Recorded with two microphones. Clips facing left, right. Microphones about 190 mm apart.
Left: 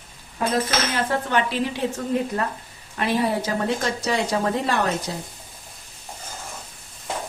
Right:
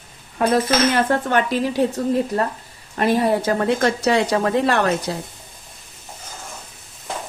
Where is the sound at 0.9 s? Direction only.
55° right (ahead or behind); by 5.2 s 70° right (ahead or behind).